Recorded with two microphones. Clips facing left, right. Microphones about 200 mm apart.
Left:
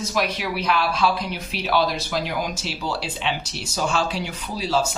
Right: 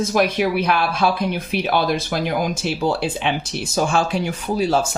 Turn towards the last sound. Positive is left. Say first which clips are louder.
# right 5 dB
turn(degrees=-50)  # may be behind; listen again after turning